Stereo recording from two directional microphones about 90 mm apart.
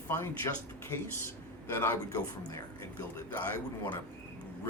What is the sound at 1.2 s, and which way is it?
Speech, 25° left (ahead or behind).